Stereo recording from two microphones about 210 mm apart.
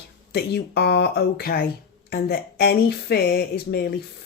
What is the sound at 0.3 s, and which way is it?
Speech, 50° left (ahead or behind).